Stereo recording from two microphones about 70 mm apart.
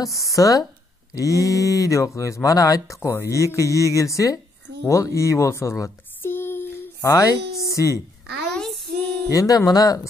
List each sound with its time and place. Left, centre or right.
0.0 s speech: left
3.0 s speech: left
4.8 s a sound: left
7.1 s speech: left
8.5 s child singing: centre
9.3 s speech: left